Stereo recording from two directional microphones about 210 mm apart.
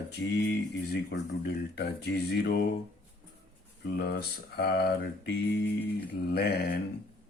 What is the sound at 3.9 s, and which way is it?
Speech, 50° left (ahead or behind).